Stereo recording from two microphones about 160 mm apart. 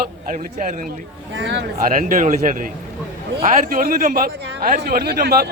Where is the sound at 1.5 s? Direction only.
90° right.